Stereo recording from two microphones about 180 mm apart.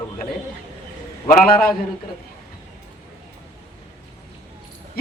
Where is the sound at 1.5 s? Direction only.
55° left (ahead or behind).